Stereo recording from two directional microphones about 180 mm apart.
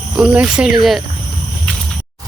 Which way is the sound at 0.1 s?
5° right (ahead or behind).